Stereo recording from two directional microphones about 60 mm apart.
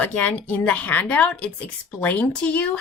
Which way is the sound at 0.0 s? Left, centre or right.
Left.